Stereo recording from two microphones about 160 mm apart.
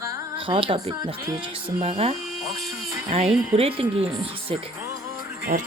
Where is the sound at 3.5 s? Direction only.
35° right (ahead or behind).